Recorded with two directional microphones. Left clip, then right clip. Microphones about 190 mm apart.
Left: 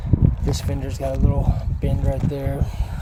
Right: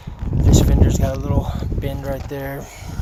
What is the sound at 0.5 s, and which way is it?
Speech, 5° left (ahead or behind).